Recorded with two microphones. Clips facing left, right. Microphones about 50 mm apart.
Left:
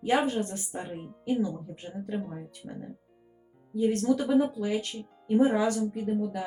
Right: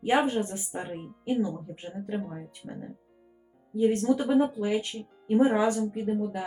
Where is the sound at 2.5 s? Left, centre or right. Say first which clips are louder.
Right 1 dB; right.